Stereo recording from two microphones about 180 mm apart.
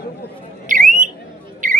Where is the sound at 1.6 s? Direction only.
45° right (ahead or behind).